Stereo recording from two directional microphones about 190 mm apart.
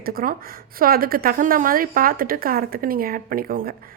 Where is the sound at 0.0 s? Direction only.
50° right (ahead or behind).